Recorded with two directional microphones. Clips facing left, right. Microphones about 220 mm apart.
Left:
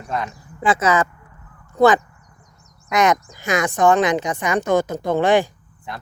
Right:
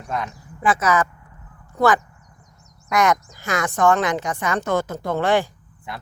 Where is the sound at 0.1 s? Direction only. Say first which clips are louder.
Left 2 dB; centre (ahead or behind).